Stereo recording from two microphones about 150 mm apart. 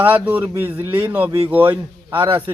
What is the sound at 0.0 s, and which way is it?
Speech, 10° right (ahead or behind).